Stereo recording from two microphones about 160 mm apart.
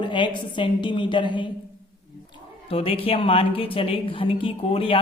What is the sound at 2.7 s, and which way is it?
A woman's voice, 35° left (ahead or behind).